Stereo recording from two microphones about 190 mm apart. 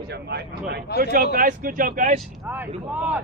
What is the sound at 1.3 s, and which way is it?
Speech, 50° right (ahead or behind).